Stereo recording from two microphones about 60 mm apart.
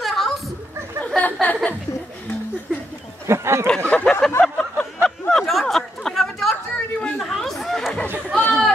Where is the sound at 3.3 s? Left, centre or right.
Right.